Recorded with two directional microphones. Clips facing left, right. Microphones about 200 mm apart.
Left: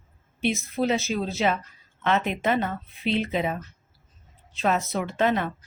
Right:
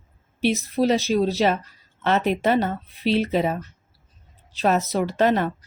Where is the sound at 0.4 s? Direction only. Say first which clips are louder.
Right 4 dB; 35° right (ahead or behind).